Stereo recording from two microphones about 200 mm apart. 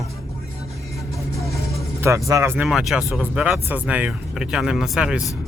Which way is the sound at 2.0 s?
15° right (ahead or behind).